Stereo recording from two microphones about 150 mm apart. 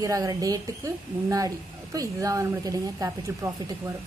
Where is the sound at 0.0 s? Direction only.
25° right (ahead or behind).